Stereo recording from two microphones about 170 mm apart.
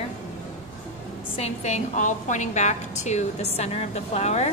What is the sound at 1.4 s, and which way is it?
A woman's voice, 40° left (ahead or behind).